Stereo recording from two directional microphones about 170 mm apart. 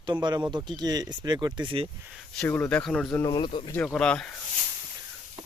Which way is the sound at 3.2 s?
25° left (ahead or behind).